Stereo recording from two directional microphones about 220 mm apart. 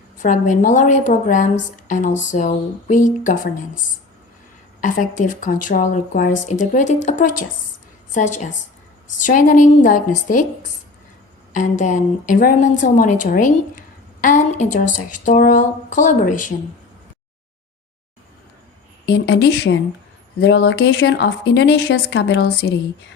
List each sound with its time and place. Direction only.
0.2 s a woman's voice: 35° left (ahead or behind)
4.8 s a woman's voice: 35° left (ahead or behind)
19.0 s speech: 50° left (ahead or behind)